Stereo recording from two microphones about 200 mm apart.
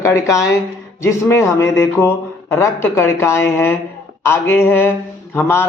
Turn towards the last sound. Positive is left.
turn(degrees=10)  # may be behind; listen again after turning